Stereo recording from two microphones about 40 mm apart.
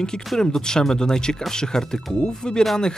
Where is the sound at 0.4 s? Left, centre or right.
Centre.